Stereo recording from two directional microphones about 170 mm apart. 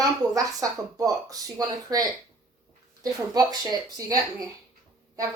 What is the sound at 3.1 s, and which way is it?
Speech, 25° right (ahead or behind).